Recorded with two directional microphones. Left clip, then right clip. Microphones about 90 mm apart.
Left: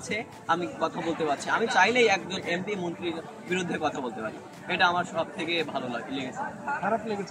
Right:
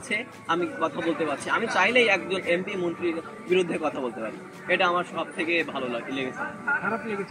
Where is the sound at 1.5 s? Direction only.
30° left (ahead or behind).